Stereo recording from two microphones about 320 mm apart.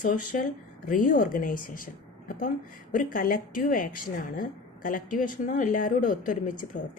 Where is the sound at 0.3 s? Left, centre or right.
Left.